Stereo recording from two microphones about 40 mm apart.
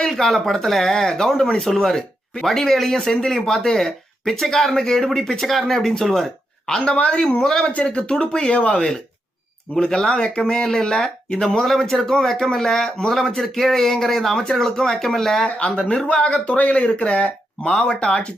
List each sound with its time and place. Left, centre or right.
0.1 s speech: centre
6.7 s speech: left
6.9 s speech: left
8.4 s speech: left; by 15.4 s centre
15.4 s speech: left
17.6 s speech: centre